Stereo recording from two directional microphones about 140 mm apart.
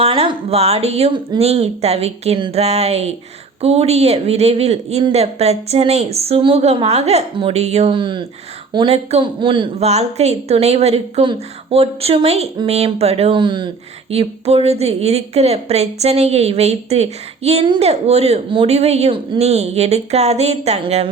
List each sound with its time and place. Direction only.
0.0 s a woman's voice: 40° right (ahead or behind)
9.9 s a woman's voice: 50° right (ahead or behind)